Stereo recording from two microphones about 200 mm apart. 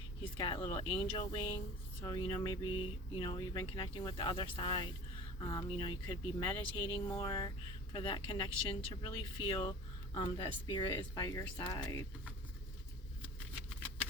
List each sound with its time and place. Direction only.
0.2 s speech: 25° left (ahead or behind)